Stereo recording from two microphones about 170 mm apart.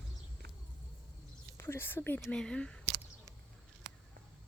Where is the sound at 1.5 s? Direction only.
15° left (ahead or behind).